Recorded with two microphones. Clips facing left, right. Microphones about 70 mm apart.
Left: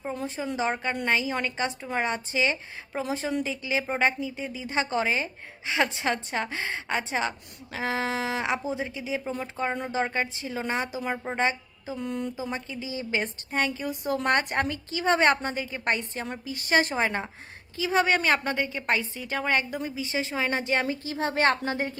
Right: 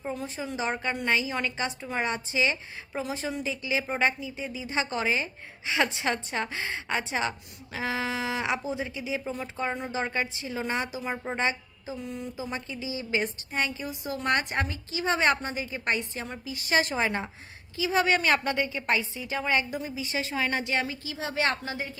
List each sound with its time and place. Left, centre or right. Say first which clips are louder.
0.1 s a woman's voice: left 2 dB; left
11.9 s a woman's voice: left 6 dB; left
12.4 s a woman's voice: left 1 dB; left
18.9 s a woman's voice: left 1 dB; left
20.0 s a woman's voice: left 1 dB; left